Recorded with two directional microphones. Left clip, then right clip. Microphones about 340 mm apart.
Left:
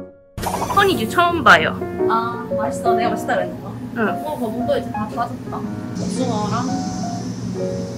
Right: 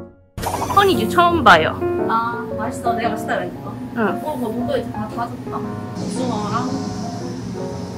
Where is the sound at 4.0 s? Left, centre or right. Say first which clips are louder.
Even; centre.